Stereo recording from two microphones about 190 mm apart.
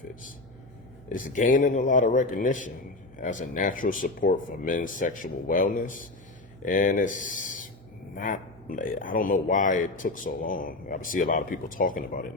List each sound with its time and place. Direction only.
1.1 s speech: 45° left (ahead or behind)